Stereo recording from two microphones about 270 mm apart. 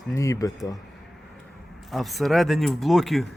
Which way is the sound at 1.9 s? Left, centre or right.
Centre.